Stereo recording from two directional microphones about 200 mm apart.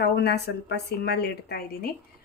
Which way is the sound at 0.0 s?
55° left (ahead or behind).